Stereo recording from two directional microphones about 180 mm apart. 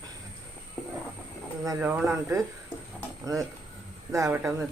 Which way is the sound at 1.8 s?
10° right (ahead or behind).